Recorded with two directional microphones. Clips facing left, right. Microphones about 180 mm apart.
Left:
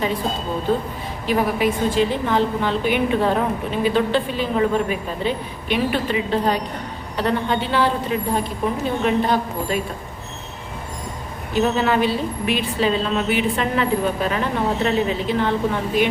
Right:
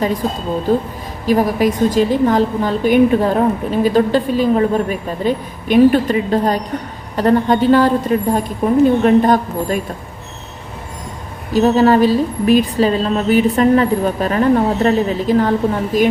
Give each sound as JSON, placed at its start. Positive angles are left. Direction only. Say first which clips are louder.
{"t": 1.3, "sound": "a woman's voice", "louder": "right 5 dB", "side_deg": -40}
{"t": 11.5, "sound": "a woman's voice", "louder": "right 7 dB", "side_deg": -40}